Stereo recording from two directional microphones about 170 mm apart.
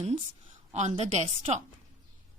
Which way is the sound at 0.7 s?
40° right (ahead or behind).